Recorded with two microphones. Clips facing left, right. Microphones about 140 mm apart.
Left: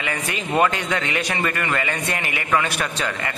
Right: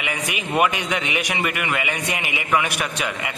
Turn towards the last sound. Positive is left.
turn(degrees=-10)  # may be behind; listen again after turning